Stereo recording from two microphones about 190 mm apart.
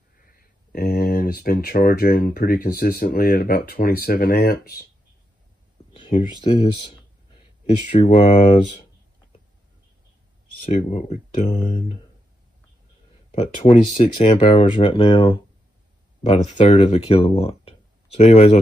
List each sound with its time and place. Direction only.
0.3 s speech: 50° left (ahead or behind)
5.9 s a sound: 30° left (ahead or behind)
6.5 s speech: 35° left (ahead or behind)
8.1 s speech: 40° left (ahead or behind)
10.6 s speech: 35° left (ahead or behind)
13.3 s speech: 35° left (ahead or behind)